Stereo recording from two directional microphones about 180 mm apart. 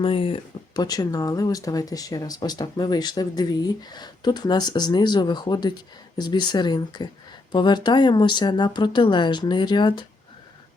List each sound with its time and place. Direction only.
0.0 s speech: 30° left (ahead or behind)